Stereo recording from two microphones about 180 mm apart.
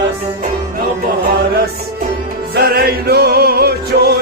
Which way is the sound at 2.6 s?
60° right (ahead or behind).